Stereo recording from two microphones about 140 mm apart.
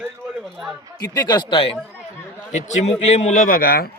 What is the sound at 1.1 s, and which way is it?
Speech, 30° left (ahead or behind).